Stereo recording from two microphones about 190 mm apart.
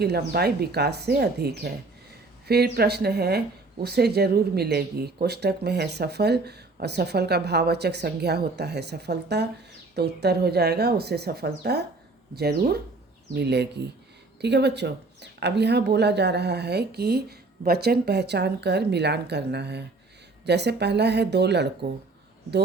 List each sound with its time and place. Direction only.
0.0 s speech: 55° right (ahead or behind)